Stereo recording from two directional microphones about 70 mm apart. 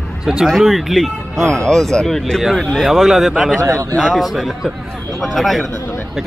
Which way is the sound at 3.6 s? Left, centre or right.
Right.